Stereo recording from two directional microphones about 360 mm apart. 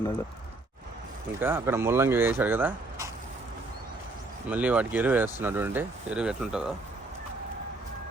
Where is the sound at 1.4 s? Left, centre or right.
Centre.